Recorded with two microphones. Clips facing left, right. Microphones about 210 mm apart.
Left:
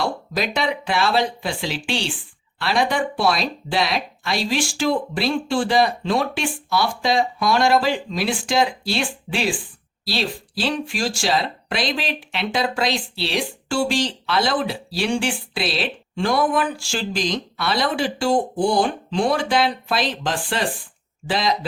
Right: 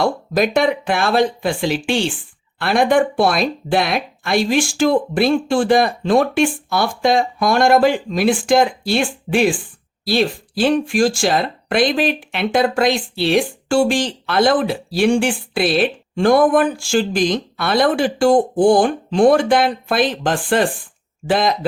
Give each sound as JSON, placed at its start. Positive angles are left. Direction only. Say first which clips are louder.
{"t": 0.0, "sound": "speech", "louder": "right 7 dB", "side_deg": -50}